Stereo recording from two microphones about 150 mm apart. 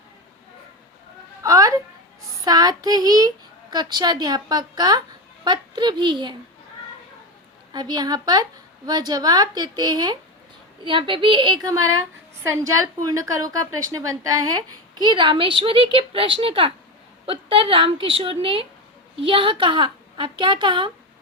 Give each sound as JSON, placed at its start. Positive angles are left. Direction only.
{"t": 1.4, "sound": "a sound", "side_deg": -20}
{"t": 2.4, "sound": "a woman's voice", "side_deg": -25}
{"t": 7.7, "sound": "a woman's voice", "side_deg": -30}